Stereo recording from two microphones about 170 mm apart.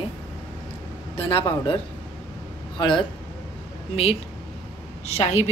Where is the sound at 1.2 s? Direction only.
30° left (ahead or behind).